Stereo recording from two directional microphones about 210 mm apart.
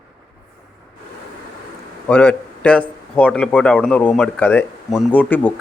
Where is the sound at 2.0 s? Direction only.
5° left (ahead or behind).